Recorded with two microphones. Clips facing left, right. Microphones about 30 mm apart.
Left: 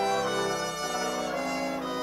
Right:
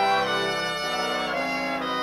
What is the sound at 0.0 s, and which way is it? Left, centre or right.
Brass instrument, right.